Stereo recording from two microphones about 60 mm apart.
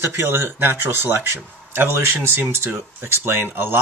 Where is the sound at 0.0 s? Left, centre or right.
Right.